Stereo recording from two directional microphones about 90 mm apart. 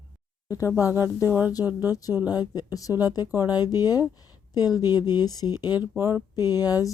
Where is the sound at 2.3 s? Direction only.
45° left (ahead or behind).